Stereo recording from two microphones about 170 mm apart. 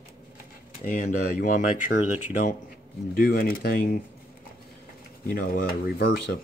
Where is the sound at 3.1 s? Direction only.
60° left (ahead or behind).